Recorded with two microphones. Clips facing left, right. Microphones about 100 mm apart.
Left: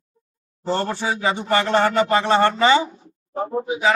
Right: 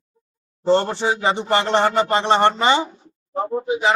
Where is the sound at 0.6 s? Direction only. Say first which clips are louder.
Right 5 dB; 25° right (ahead or behind).